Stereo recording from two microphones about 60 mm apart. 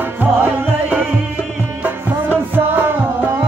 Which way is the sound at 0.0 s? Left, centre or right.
Right.